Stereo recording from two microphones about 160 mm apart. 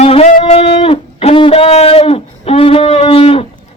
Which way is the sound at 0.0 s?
40° left (ahead or behind).